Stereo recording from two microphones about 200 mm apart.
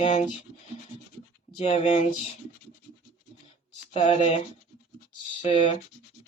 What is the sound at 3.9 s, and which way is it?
Speech, 30° left (ahead or behind).